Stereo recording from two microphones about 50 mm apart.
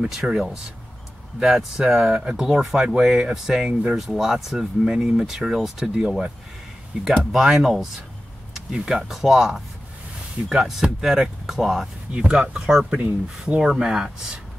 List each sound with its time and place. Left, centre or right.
0.0 s speech: centre
7.4 s speech: centre
12.1 s speech: right